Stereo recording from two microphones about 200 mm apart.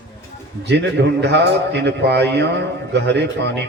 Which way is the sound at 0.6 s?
60° right (ahead or behind).